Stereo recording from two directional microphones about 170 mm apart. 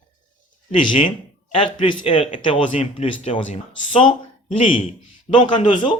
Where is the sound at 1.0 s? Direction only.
30° left (ahead or behind).